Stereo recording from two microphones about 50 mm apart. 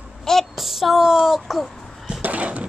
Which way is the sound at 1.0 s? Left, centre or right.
Centre.